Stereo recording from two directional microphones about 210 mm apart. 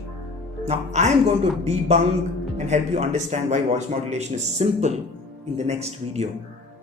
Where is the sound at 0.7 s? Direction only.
35° right (ahead or behind).